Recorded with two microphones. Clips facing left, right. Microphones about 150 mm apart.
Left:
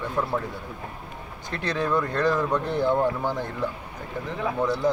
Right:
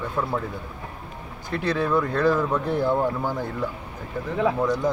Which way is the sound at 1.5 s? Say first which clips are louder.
Right 3 dB; 5° right (ahead or behind).